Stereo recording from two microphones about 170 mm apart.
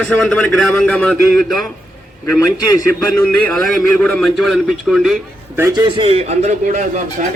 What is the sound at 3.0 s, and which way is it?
A man's voice, 10° left (ahead or behind).